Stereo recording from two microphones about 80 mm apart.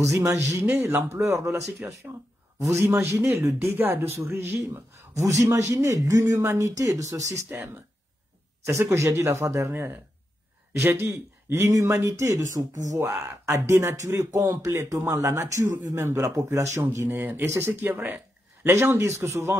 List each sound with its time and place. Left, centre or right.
0.0 s speech: right
5.1 s a man's voice: right
7.4 s speech: right
8.9 s speech: right
17.1 s speech: right